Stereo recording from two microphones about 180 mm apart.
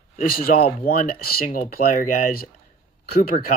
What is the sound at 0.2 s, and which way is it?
Speech, 55° left (ahead or behind).